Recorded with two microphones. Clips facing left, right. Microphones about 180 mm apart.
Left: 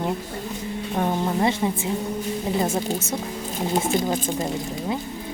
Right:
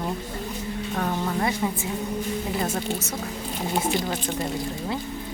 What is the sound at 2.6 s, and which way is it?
Speech, 20° left (ahead or behind).